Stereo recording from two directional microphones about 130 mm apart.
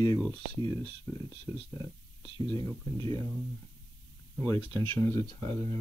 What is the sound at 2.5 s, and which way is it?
Speech, 25° left (ahead or behind).